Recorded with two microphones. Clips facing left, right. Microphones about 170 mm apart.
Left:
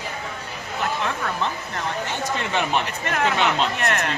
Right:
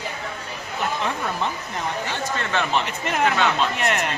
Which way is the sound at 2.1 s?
15° left (ahead or behind).